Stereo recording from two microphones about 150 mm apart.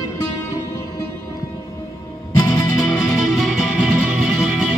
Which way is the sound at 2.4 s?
30° left (ahead or behind).